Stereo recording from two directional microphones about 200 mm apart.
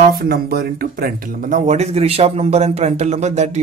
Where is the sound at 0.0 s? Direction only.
50° right (ahead or behind).